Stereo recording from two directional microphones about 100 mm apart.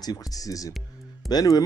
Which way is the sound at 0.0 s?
40° left (ahead or behind).